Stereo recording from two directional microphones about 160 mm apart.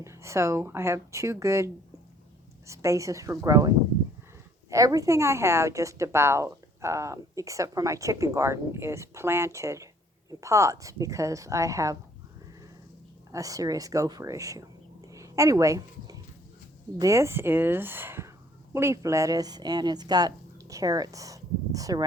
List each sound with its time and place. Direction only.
0.0 s a woman's voice: 15° right (ahead or behind)
13.3 s speech: 20° right (ahead or behind)